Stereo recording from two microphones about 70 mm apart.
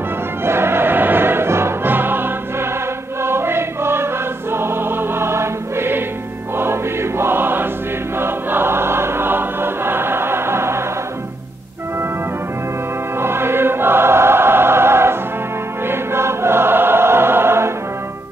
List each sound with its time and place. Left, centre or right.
0.5 s music: right
6.5 s choir: right
13.2 s choir: right